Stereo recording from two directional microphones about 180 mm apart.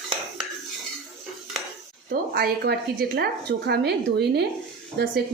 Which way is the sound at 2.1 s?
60° right (ahead or behind).